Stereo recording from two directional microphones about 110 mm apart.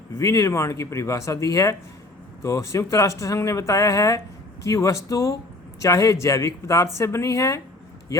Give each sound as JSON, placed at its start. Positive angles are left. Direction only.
{"t": 0.2, "sound": "speech", "side_deg": 25}